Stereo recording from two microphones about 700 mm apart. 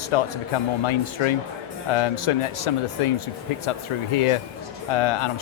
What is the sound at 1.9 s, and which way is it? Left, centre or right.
A man's voice, left.